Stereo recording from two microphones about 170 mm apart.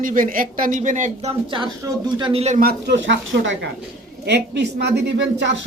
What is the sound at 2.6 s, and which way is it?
Speech, 70° right (ahead or behind).